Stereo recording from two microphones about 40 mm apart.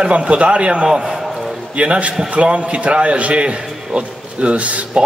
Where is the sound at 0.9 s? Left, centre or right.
Centre.